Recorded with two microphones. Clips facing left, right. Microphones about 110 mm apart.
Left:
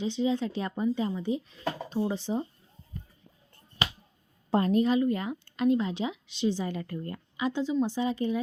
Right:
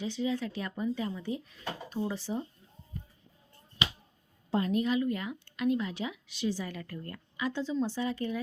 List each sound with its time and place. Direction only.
0.0 s a woman's voice: 25° left (ahead or behind)
4.5 s a woman's voice: 40° left (ahead or behind); by 8.4 s 20° left (ahead or behind)